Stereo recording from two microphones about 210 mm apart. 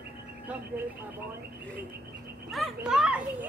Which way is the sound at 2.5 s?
Centre (ahead or behind).